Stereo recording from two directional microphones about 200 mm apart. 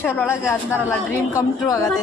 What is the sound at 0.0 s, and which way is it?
Speech, 10° left (ahead or behind).